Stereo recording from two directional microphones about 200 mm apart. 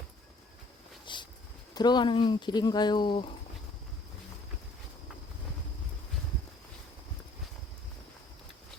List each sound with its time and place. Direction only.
1.0 s vehicle: 25° left (ahead or behind)
1.7 s speech: 20° left (ahead or behind)